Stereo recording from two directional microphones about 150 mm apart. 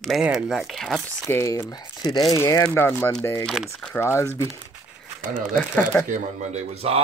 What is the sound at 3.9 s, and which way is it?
Speech, 15° left (ahead or behind).